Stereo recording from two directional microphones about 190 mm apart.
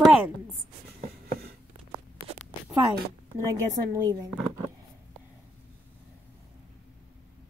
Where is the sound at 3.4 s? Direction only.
15° right (ahead or behind).